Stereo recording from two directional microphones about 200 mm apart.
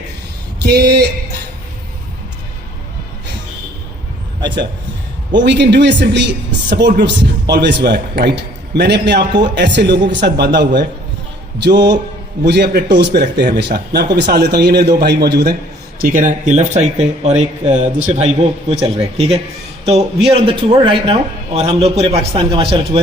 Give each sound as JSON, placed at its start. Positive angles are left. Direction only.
{"t": 0.6, "sound": "a sound", "side_deg": -55}
{"t": 5.4, "sound": "speech", "side_deg": -60}
{"t": 11.6, "sound": "speech", "side_deg": -55}
{"t": 16.0, "sound": "a man's voice", "side_deg": -45}